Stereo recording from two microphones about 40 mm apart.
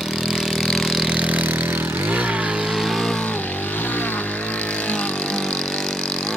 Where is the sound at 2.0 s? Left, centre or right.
Right.